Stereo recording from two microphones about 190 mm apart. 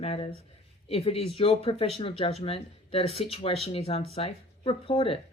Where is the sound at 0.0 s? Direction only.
30° left (ahead or behind).